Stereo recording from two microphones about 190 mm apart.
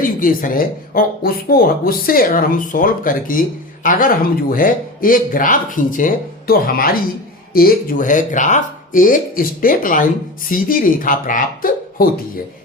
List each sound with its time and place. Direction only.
0.0 s speech: 45° left (ahead or behind)